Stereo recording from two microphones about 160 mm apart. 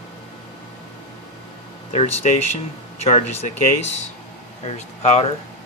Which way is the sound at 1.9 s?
40° left (ahead or behind).